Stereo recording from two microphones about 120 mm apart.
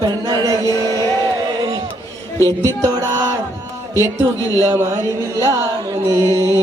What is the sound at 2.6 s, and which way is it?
Music, 25° right (ahead or behind).